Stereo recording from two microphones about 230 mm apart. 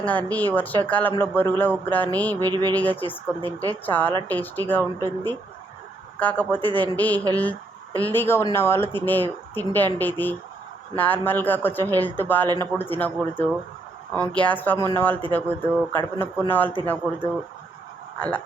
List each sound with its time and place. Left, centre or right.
0.0 s speech: centre
2.4 s a sound: centre
2.7 s speech: centre